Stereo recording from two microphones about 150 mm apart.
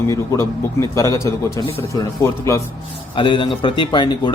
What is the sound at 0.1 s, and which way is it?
A man's voice, 20° left (ahead or behind).